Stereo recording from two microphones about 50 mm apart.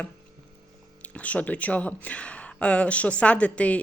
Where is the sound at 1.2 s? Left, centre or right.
Left.